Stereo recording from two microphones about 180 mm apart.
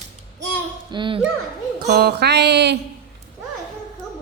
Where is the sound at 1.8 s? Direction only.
60° right (ahead or behind).